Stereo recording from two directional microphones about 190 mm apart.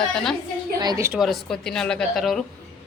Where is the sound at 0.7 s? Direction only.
20° right (ahead or behind).